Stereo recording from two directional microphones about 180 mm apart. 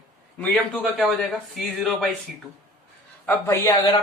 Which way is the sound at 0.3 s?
Centre (ahead or behind).